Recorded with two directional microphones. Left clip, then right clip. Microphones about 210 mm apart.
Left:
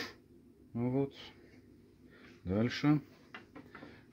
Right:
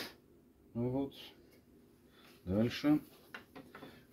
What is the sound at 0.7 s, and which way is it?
Speech, 55° left (ahead or behind).